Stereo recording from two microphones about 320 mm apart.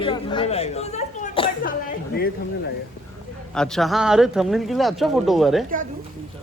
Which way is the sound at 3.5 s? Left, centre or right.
Centre.